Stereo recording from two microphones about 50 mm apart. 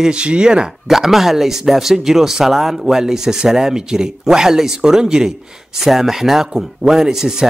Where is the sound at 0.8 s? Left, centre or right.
Centre.